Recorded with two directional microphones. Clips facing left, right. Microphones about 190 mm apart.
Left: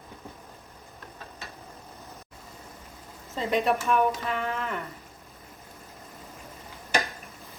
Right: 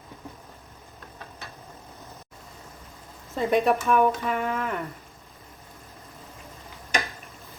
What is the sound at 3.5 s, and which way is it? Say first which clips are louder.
Speech: right 3 dB; 50° right (ahead or behind).